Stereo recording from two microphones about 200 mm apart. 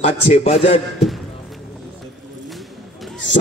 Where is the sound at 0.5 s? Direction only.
30° left (ahead or behind).